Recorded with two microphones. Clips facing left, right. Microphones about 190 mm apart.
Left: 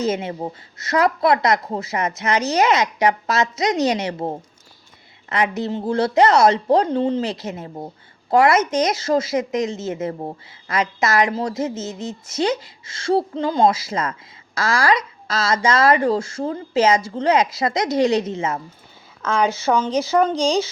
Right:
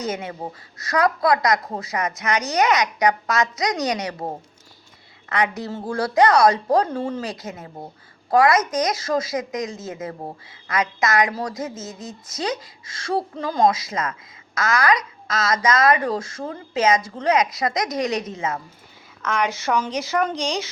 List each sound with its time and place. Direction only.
0.0 s a woman's voice: 25° left (ahead or behind)
5.3 s a woman's voice: 25° left (ahead or behind)